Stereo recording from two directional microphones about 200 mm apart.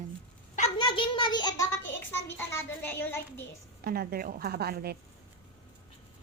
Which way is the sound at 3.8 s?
50° right (ahead or behind).